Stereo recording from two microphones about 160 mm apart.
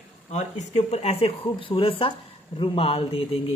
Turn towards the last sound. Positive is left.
turn(degrees=35)  # may be behind; listen again after turning